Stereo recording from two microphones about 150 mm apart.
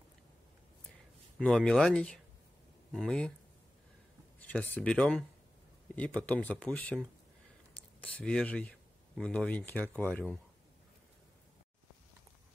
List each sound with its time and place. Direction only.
1.4 s speech: 5° left (ahead or behind)
4.4 s speech: 10° left (ahead or behind)